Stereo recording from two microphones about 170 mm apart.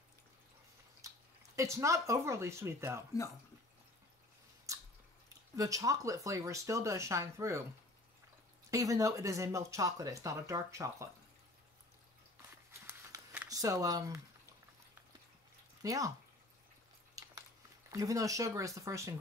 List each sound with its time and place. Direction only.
1.0 s speech: 20° right (ahead or behind)
4.7 s biting: 20° right (ahead or behind)
5.6 s speech: 20° right (ahead or behind)
8.6 s speech: 20° right (ahead or behind)
12.8 s a sound: 10° right (ahead or behind)
13.5 s speech: 20° right (ahead or behind)
15.8 s speech: 20° right (ahead or behind)
17.2 s a sound: 20° right (ahead or behind)
17.9 s speech: 20° right (ahead or behind)